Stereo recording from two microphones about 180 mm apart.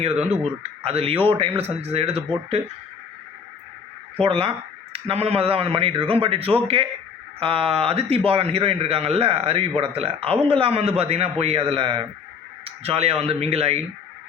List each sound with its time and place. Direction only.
0.9 s a man's voice: 35° right (ahead or behind)
4.2 s a man's voice: 30° right (ahead or behind)